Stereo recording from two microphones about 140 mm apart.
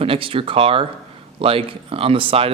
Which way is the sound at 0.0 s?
40° right (ahead or behind).